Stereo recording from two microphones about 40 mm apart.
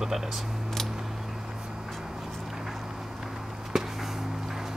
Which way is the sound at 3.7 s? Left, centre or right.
Centre.